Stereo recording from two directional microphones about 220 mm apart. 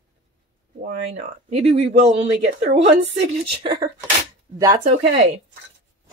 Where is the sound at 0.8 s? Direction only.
30° right (ahead or behind).